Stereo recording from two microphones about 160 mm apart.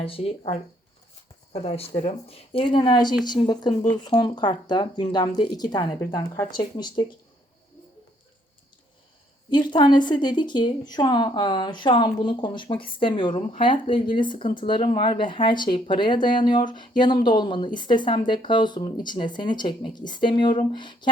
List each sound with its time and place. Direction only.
0.0 s speech: 35° left (ahead or behind)
1.6 s speech: 40° left (ahead or behind)
9.5 s speech: 30° left (ahead or behind)